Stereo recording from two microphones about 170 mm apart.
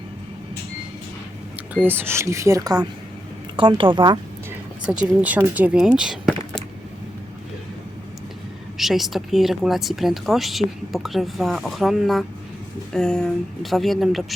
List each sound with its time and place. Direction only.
1.7 s a woman's voice: 10° right (ahead or behind)
4.9 s speech: 5° right (ahead or behind)
8.8 s speech: centre (ahead or behind)